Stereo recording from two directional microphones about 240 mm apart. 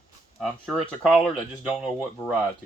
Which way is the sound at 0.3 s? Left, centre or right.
Centre.